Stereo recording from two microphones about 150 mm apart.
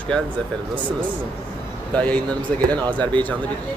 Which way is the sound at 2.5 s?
10° left (ahead or behind).